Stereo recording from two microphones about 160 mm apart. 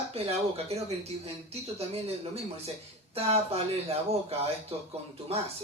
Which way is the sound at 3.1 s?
40° right (ahead or behind).